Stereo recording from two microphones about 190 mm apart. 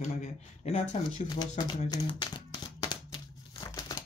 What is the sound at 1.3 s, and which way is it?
Speech, 20° left (ahead or behind).